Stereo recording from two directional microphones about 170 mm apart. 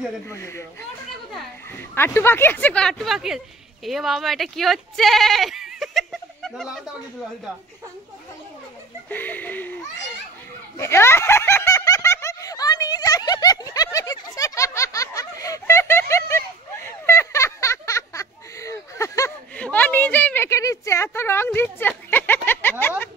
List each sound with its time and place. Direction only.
0.3 s speech: 15° left (ahead or behind)
2.0 s speech: 15° left (ahead or behind)
9.1 s speech: 10° left (ahead or behind)
10.8 s snicker: 15° left (ahead or behind)
21.7 s a sound: 10° left (ahead or behind)